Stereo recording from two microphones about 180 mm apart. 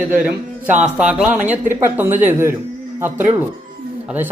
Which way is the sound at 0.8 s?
5° right (ahead or behind).